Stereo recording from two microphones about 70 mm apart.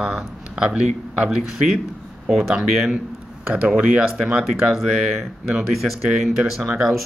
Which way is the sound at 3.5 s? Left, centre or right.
Centre.